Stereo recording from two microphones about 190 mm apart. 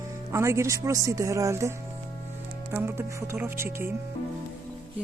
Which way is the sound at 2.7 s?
15° right (ahead or behind).